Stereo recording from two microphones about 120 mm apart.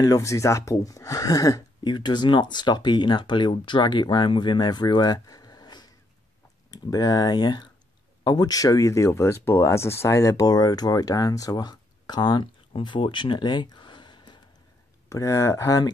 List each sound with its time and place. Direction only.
0.0 s speech: 30° left (ahead or behind)
15.0 s speech: 25° left (ahead or behind)